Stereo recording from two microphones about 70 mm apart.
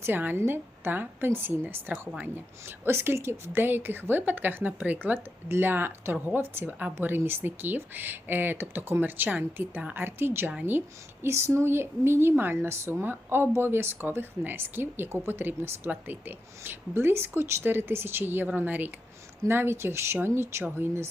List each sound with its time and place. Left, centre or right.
0.0 s a woman's voice: right
2.6 s a woman's voice: right
11.3 s a woman's voice: right